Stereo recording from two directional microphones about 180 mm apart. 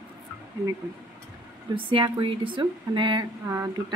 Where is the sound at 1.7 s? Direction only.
30° right (ahead or behind).